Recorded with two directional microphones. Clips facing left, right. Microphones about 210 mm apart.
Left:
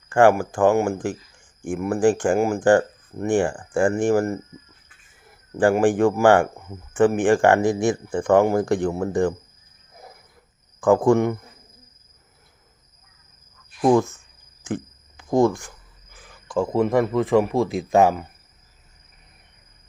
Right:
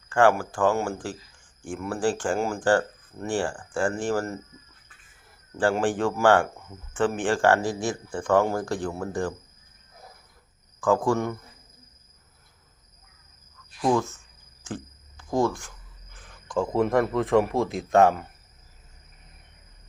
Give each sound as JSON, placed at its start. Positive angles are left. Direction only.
{"t": 0.1, "sound": "speech", "side_deg": 15}
{"t": 5.5, "sound": "speech", "side_deg": 15}
{"t": 10.8, "sound": "speech", "side_deg": 20}
{"t": 15.2, "sound": "speech", "side_deg": 15}
{"t": 16.1, "sound": "a man's voice", "side_deg": 5}